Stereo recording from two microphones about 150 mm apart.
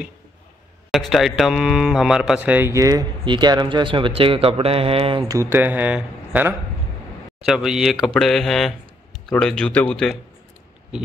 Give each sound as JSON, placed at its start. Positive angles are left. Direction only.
{"t": 0.9, "sound": "speech", "side_deg": 0}
{"t": 5.3, "sound": "speech", "side_deg": -15}